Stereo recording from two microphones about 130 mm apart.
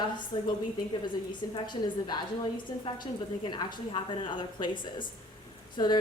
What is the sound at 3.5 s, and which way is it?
Speech, 35° left (ahead or behind).